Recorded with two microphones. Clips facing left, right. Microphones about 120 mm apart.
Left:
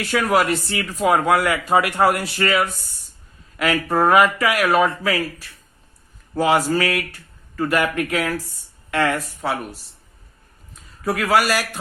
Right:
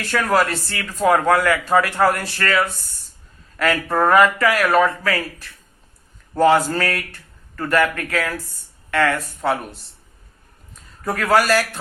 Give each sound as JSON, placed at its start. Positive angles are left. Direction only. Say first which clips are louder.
{"t": 0.0, "sound": "speech", "louder": "even", "side_deg": 15}
{"t": 6.3, "sound": "speech", "louder": "right 2 dB", "side_deg": 10}
{"t": 9.4, "sound": "speech", "louder": "right 4 dB", "side_deg": 5}
{"t": 11.0, "sound": "speech", "louder": "right 1 dB", "side_deg": 5}